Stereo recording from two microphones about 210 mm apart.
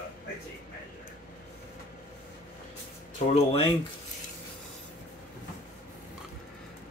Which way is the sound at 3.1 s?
30° left (ahead or behind).